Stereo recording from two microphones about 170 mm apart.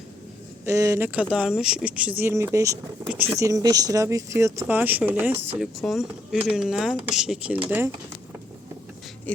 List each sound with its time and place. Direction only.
0.6 s speech: 15° right (ahead or behind)
5.5 s speech: centre (ahead or behind)